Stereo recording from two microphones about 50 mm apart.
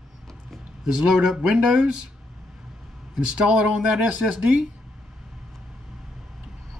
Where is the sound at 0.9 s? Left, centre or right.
Centre.